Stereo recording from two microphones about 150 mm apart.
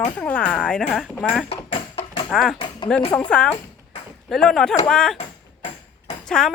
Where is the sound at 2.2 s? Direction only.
5° left (ahead or behind).